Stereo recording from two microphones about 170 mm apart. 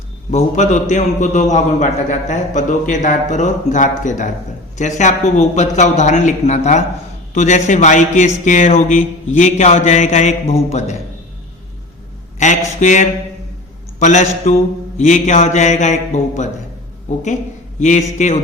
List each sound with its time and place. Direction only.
0.3 s a man's voice: 45° left (ahead or behind)
12.4 s a man's voice: 45° left (ahead or behind)
17.7 s a man's voice: 45° left (ahead or behind)